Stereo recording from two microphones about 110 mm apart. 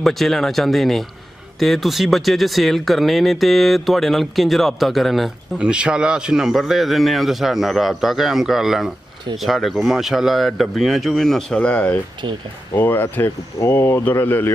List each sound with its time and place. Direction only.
0.0 s speech: centre (ahead or behind); by 14.5 s 20° left (ahead or behind)